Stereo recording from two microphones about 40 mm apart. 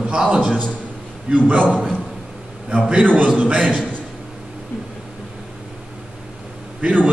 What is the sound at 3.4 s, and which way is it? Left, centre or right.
Speech, right.